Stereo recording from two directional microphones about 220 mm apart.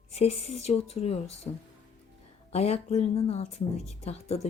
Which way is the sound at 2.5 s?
30° left (ahead or behind).